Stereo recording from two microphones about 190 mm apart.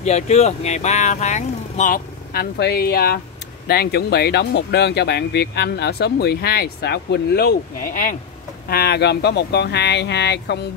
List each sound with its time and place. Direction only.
0.0 s speech: 35° left (ahead or behind); by 10.6 s 65° left (ahead or behind)